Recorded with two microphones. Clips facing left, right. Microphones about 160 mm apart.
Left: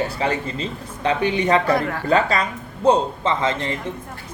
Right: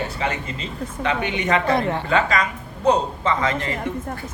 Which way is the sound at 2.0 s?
35° left (ahead or behind).